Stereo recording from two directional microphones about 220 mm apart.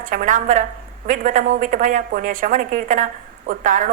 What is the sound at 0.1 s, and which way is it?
A woman's voice, 35° right (ahead or behind).